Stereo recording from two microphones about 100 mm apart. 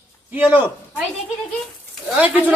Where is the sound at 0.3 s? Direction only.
15° right (ahead or behind).